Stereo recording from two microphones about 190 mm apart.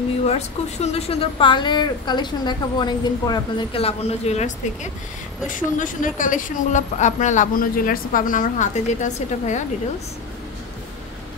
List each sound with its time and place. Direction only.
0.3 s a woman's voice: 35° left (ahead or behind)